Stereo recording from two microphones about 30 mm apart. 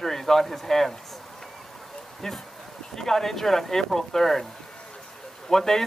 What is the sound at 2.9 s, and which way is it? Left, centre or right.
Speech, centre.